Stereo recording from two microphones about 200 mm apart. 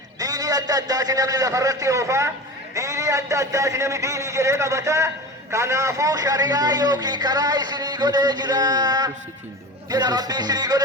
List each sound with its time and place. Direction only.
0.2 s a man's voice: 20° right (ahead or behind)
9.9 s music: 20° right (ahead or behind)